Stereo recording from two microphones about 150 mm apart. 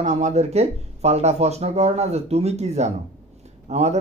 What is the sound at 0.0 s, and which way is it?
Speech, 50° right (ahead or behind).